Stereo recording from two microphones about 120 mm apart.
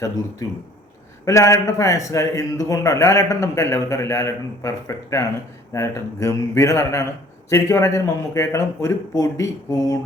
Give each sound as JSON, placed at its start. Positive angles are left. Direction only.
{"t": 1.2, "sound": "a man's voice", "side_deg": 25}